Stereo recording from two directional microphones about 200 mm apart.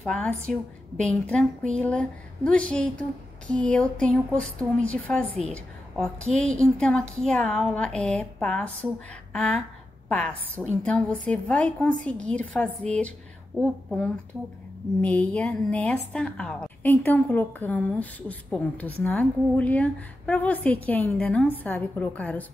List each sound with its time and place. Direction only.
0.0 s a woman's voice: 5° left (ahead or behind)